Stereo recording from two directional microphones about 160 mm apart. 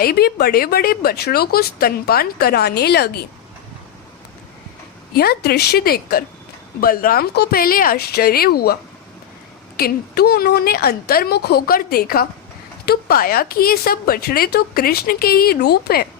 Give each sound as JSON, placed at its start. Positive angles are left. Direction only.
{"t": 0.0, "sound": "speech", "side_deg": 75}
{"t": 5.1, "sound": "speech", "side_deg": 75}